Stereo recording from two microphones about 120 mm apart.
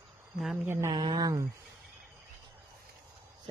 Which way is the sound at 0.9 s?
35° right (ahead or behind).